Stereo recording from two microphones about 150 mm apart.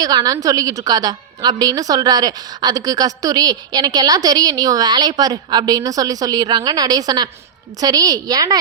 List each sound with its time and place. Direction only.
0.0 s a woman's voice: 25° right (ahead or behind)